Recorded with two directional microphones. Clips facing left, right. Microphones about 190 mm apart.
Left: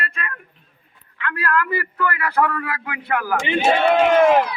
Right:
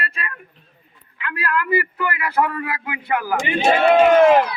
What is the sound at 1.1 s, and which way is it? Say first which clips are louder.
A man's voice: left 2 dB; 10° right (ahead or behind).